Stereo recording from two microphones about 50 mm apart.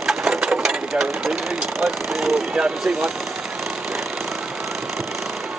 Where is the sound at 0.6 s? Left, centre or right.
Centre.